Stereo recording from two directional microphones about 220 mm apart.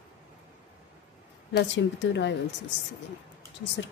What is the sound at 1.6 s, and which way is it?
Speech, 55° left (ahead or behind).